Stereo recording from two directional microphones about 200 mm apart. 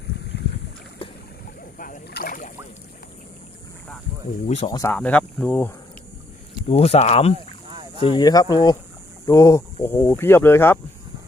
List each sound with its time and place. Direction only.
0.3 s boat: 60° left (ahead or behind)
1.8 s rowboat: 45° left (ahead or behind)
4.4 s speech: 30° left (ahead or behind)
4.7 s speech: 15° left (ahead or behind)
4.9 s speech: 5° left (ahead or behind)
6.7 s speech: 30° left (ahead or behind)
7.7 s boat: 25° right (ahead or behind)
8.0 s speech: 20° left (ahead or behind)